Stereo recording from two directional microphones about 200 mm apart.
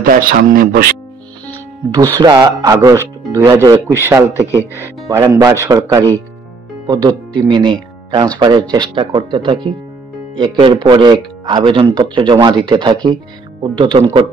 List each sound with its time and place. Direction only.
0.0 s speech: 45° right (ahead or behind)
2.1 s speech: 20° right (ahead or behind)